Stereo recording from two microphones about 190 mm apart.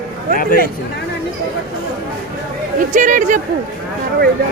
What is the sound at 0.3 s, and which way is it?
Speech, 50° left (ahead or behind).